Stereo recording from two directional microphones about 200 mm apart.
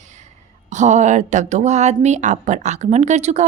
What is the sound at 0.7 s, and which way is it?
A woman's voice, 35° right (ahead or behind).